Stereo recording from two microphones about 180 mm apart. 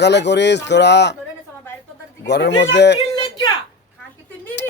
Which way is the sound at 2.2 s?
70° left (ahead or behind).